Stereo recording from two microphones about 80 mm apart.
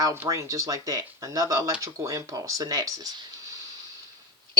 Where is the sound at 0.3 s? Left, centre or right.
Right.